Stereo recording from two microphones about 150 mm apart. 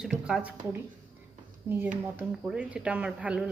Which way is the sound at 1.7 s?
15° right (ahead or behind).